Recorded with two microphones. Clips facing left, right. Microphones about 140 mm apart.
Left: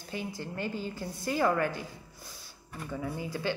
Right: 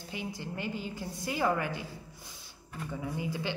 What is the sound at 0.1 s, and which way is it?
A woman's voice, 15° right (ahead or behind).